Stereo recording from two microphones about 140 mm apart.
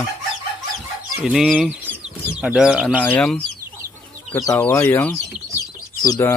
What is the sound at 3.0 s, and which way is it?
Speech, 10° left (ahead or behind).